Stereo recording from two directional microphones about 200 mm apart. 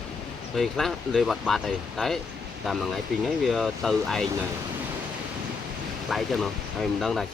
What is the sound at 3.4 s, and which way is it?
Speech, centre (ahead or behind).